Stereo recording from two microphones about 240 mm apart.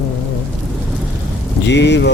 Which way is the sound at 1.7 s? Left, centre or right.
Left.